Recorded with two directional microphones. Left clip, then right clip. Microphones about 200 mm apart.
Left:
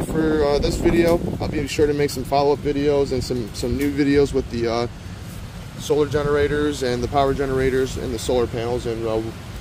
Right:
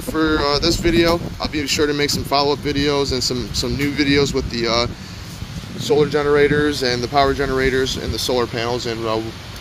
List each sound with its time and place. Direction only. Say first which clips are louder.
0.2 s speech: right 2 dB; centre (ahead or behind)
5.8 s speech: right 3 dB; 15° right (ahead or behind)
6.7 s speech: right 3 dB; centre (ahead or behind)